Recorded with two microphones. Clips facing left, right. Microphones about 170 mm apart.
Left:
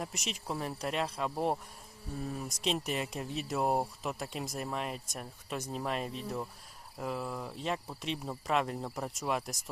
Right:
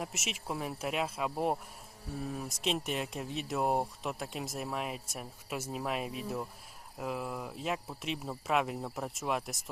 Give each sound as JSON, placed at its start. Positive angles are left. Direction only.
{"t": 0.0, "sound": "speech", "side_deg": -5}